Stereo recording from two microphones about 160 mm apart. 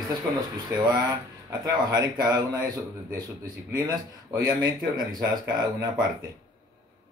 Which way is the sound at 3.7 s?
20° right (ahead or behind).